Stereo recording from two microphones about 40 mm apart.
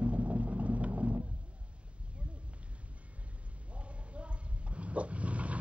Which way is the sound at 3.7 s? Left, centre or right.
Right.